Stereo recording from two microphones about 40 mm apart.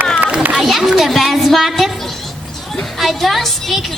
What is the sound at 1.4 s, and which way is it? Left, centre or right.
Speech, centre.